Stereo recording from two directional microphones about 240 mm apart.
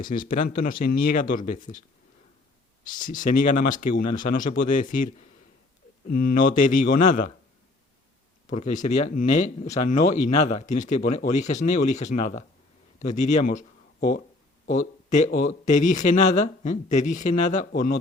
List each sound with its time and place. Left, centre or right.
0.0 s speech: left
2.8 s speech: left
6.1 s speech: left
8.4 s speech: left
9.7 s speech: left
10.1 s speech: left